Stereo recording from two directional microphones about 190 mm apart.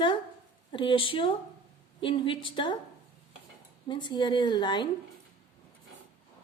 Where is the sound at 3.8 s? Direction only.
25° left (ahead or behind).